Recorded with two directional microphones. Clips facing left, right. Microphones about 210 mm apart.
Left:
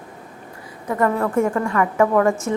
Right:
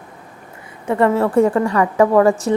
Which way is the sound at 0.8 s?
25° right (ahead or behind).